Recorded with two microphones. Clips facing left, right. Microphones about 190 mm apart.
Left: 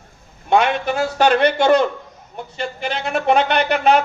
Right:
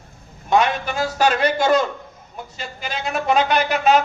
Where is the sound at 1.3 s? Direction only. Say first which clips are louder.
Left 3 dB; 65° left (ahead or behind).